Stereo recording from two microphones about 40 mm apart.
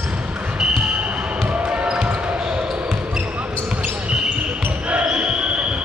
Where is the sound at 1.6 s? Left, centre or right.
Right.